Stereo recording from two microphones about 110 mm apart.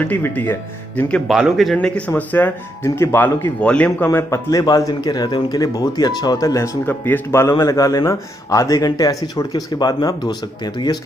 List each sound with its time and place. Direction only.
0.0 s speech: 15° left (ahead or behind)
1.2 s speech: centre (ahead or behind); by 3.5 s 25° left (ahead or behind)
3.6 s speech: 10° left (ahead or behind)
4.1 s speech: 25° left (ahead or behind); by 11.0 s 40° left (ahead or behind)